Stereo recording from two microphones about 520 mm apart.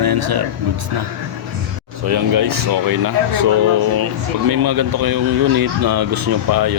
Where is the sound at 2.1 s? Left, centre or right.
Right.